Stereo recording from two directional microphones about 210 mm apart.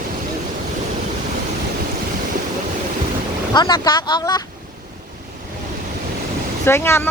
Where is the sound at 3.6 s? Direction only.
20° left (ahead or behind).